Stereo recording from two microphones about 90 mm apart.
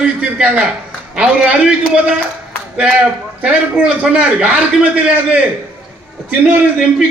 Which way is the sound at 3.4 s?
10° right (ahead or behind).